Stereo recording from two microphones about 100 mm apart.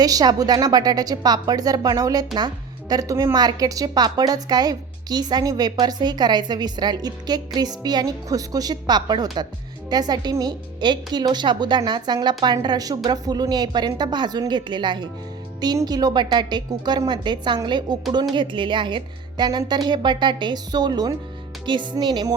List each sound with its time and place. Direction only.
0.0 s a woman's voice: 40° right (ahead or behind)